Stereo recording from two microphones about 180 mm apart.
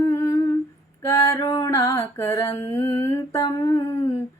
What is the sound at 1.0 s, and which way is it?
Female singing, 15° left (ahead or behind).